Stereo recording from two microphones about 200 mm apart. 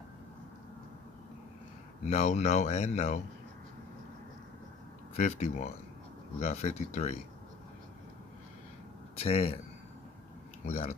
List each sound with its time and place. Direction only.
2.0 s speech: 35° left (ahead or behind)
5.1 s speech: 35° left (ahead or behind)
9.2 s speech: 30° left (ahead or behind)
10.7 s speech: 30° left (ahead or behind)